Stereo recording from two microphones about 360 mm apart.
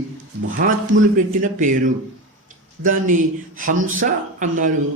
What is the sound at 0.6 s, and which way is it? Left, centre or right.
A man's voice, right.